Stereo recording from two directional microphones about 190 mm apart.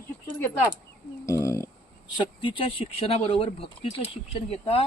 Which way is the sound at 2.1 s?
25° left (ahead or behind).